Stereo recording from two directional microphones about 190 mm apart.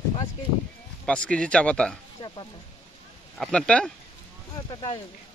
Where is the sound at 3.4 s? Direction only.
5° left (ahead or behind).